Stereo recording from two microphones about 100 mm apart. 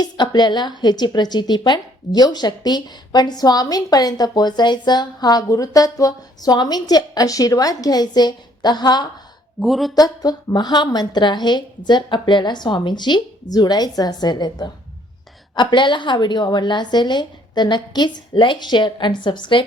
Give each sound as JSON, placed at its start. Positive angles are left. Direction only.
{"t": 0.0, "sound": "a woman's voice", "side_deg": 45}
{"t": 9.6, "sound": "speech", "side_deg": 0}
{"t": 9.9, "sound": "a woman's voice", "side_deg": 40}
{"t": 15.7, "sound": "a woman's voice", "side_deg": 55}